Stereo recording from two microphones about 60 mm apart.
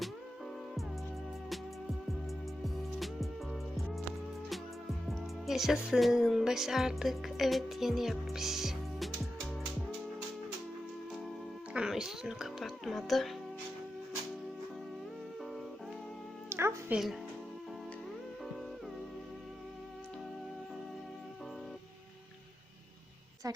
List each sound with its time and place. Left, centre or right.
3.0 s music: centre
5.0 s speech: centre
11.7 s speech: centre
16.5 s music: right